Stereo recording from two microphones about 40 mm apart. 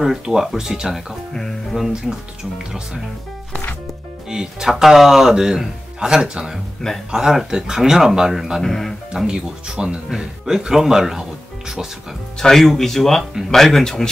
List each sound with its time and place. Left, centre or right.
0.0 s speech: centre
4.3 s speech: centre
8.6 s speech: centre
9.1 s speech: centre
12.4 s speech: centre